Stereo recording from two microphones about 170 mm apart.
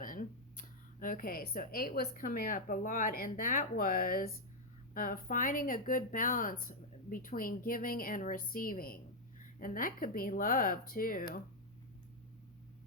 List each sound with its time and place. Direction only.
0.0 s speech: 55° left (ahead or behind)